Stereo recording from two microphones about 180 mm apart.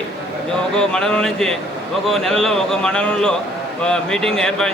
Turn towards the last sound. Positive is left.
turn(degrees=5)  # may be behind; listen again after turning